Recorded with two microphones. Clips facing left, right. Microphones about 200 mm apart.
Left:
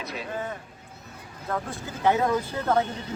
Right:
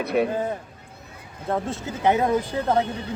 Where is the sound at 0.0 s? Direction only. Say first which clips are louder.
Right 14 dB; 60° right (ahead or behind).